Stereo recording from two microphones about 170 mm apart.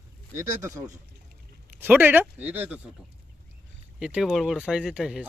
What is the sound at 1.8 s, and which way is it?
Speech, 10° right (ahead or behind).